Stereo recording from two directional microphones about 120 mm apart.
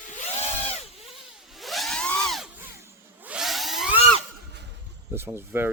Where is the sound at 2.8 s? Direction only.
15° right (ahead or behind).